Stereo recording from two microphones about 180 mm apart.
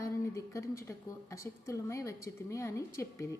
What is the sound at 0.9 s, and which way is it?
A woman's voice, 15° left (ahead or behind).